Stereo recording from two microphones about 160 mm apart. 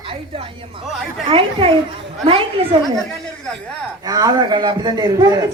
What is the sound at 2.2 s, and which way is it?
Speech, 35° right (ahead or behind).